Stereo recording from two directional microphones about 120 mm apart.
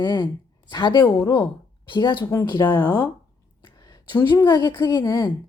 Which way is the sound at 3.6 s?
40° left (ahead or behind).